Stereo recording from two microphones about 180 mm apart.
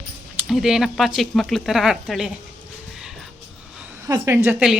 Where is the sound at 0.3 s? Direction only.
5° right (ahead or behind).